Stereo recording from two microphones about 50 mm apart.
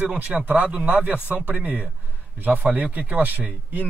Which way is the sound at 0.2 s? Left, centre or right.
Right.